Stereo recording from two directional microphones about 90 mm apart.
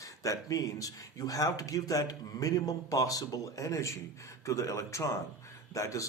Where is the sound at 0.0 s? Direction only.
35° left (ahead or behind).